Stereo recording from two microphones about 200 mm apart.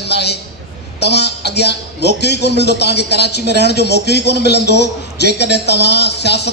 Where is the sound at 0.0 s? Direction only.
55° left (ahead or behind).